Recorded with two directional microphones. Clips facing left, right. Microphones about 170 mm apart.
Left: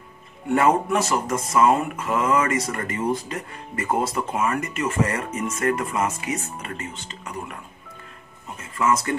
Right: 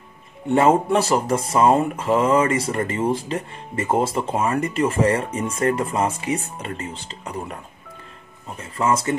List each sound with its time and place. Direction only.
0.5 s speech: 25° right (ahead or behind)
8.5 s speech: 30° right (ahead or behind)